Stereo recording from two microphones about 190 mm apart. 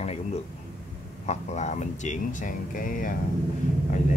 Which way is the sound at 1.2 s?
40° left (ahead or behind).